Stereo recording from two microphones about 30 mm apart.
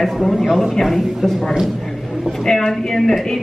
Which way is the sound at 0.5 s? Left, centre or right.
Centre.